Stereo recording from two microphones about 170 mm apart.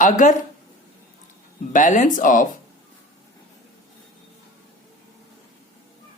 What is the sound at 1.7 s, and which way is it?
Speech, 45° left (ahead or behind).